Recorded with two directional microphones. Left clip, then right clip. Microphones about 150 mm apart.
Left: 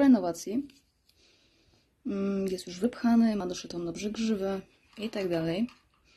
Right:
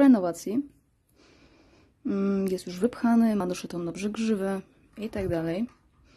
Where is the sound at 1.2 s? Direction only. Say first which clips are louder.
Right 6 dB; 50° right (ahead or behind).